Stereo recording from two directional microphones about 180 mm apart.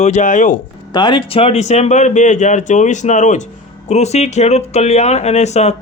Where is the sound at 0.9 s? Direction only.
25° left (ahead or behind).